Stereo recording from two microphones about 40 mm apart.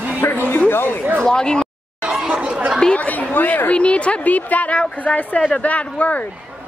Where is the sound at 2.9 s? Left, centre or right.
Left.